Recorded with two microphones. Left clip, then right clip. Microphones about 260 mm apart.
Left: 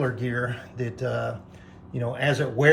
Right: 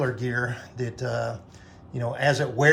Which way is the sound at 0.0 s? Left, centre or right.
Centre.